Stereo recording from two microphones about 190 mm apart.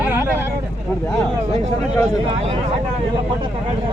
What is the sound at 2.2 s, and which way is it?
Speech, 30° right (ahead or behind).